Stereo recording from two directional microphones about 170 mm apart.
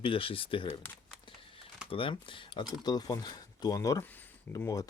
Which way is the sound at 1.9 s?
30° left (ahead or behind).